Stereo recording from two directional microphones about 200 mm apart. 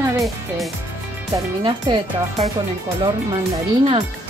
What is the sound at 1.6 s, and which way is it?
Speech, 25° right (ahead or behind).